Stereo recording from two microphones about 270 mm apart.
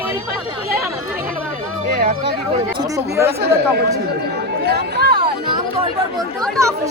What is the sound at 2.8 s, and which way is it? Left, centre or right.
Speech, centre.